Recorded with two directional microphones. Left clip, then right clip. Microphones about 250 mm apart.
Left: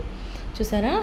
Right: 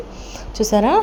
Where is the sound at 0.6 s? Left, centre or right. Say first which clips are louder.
Right 9 dB; right.